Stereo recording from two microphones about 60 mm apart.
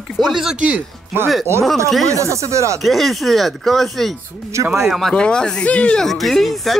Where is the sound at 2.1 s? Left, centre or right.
Right.